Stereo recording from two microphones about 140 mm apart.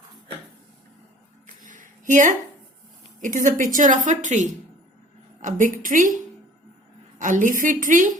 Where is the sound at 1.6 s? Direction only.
70° right (ahead or behind).